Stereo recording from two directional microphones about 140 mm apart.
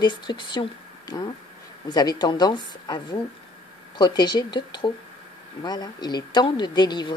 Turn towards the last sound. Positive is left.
turn(degrees=30)  # may be behind; listen again after turning